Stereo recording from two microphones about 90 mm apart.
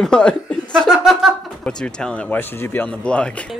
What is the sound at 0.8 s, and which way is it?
Speech, 5° right (ahead or behind).